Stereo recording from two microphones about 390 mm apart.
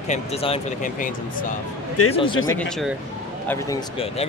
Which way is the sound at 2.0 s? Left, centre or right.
Left.